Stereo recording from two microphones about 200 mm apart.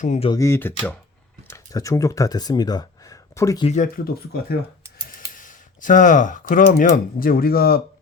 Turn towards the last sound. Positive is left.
turn(degrees=50)  # may be behind; listen again after turning